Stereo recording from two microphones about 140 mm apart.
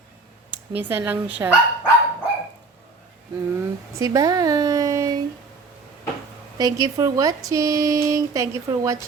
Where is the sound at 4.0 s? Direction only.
25° right (ahead or behind).